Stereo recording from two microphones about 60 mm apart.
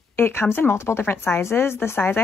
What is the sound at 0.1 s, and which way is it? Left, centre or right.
Speech, left.